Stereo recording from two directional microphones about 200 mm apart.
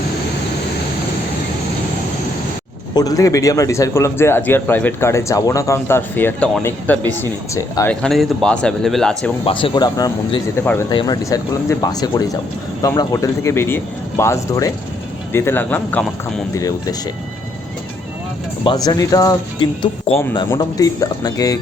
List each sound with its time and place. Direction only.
2.9 s a man's voice: 20° left (ahead or behind)
8.0 s speech: centre (ahead or behind)
9.4 s a man's voice: 25° left (ahead or behind); by 16.0 s 10° left (ahead or behind)
18.6 s a man's voice: 20° left (ahead or behind)